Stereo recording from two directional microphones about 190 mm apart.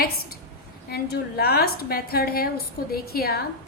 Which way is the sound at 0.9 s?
55° left (ahead or behind).